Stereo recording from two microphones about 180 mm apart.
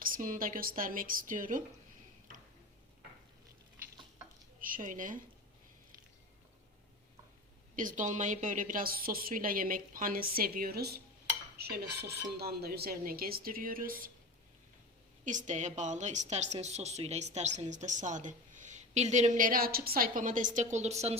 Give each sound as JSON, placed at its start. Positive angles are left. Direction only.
{"t": 0.0, "sound": "a woman's voice", "side_deg": -50}
{"t": 4.6, "sound": "speech", "side_deg": -50}
{"t": 7.8, "sound": "a woman's voice", "side_deg": -45}
{"t": 15.2, "sound": "a woman's voice", "side_deg": -45}